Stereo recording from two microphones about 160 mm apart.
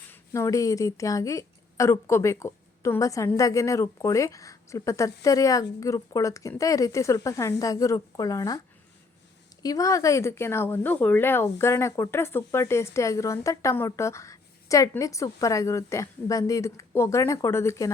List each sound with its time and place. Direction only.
0.1 s a woman's voice: 20° left (ahead or behind)
9.6 s a woman's voice: 20° left (ahead or behind)